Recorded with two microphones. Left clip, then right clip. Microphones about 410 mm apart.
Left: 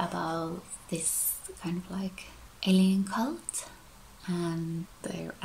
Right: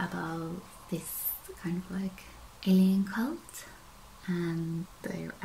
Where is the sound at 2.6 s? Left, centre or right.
Centre.